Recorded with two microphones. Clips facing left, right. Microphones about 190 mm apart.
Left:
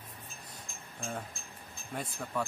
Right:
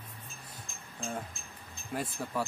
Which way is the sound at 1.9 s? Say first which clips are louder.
Right 2 dB; 5° right (ahead or behind).